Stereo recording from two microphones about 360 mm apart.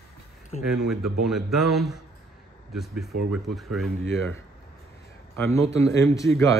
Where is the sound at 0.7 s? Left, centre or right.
Centre.